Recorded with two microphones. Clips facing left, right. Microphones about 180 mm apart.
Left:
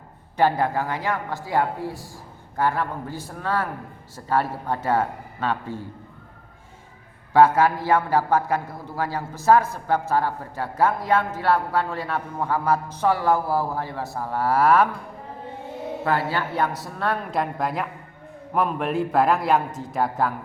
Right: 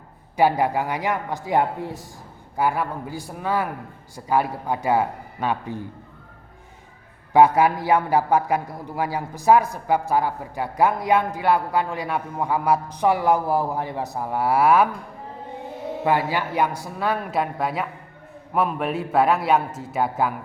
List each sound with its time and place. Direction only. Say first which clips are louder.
0.3 s a man's voice: right 1 dB; 15° right (ahead or behind)
7.3 s a man's voice: right 1 dB; 15° right (ahead or behind)
16.0 s a man's voice: right 2 dB; 15° right (ahead or behind)